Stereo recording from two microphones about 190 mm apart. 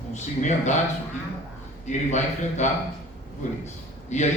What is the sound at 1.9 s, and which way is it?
Speech, 40° left (ahead or behind).